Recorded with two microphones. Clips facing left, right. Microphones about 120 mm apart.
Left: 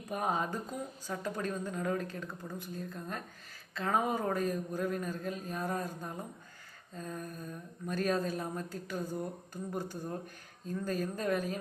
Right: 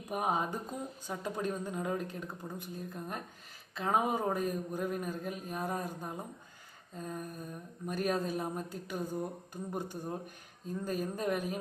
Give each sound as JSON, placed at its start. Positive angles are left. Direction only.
{"t": 0.1, "sound": "speech", "side_deg": -15}